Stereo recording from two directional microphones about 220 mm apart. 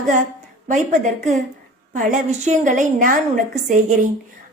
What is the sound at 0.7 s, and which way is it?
A woman's voice, 30° right (ahead or behind).